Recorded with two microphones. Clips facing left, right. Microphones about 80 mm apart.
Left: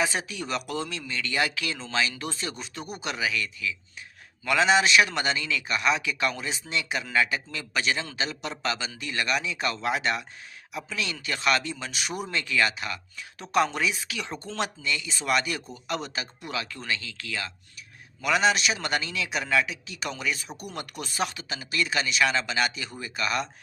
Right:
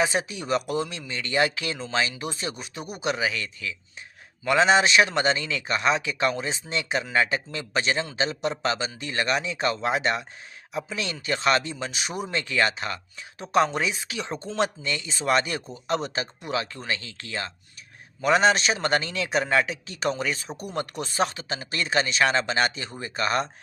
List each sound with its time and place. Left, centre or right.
0.0 s a man's voice: right
4.4 s a man's voice: right
13.4 s a man's voice: right
14.8 s a man's voice: right